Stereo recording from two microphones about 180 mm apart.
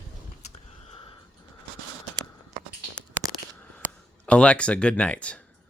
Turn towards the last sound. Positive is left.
turn(degrees=5)  # may be behind; listen again after turning